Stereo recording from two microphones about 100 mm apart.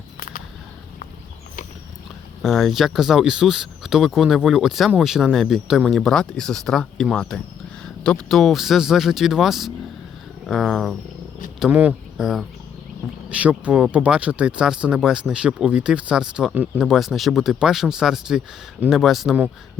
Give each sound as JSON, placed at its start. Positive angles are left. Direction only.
{"t": 2.4, "sound": "speech", "side_deg": 0}
{"t": 11.7, "sound": "speech", "side_deg": -15}
{"t": 12.1, "sound": "speech", "side_deg": -5}